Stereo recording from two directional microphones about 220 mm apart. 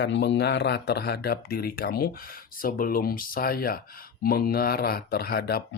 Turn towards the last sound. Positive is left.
turn(degrees=45)  # may be behind; listen again after turning